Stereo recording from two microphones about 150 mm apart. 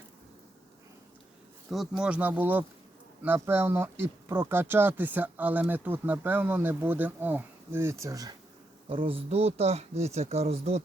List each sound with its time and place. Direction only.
1.7 s speech: 5° right (ahead or behind); by 8.4 s 25° right (ahead or behind)
8.9 s speech: 35° right (ahead or behind)